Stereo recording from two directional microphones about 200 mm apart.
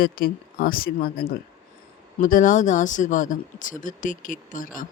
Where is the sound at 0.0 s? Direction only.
45° left (ahead or behind).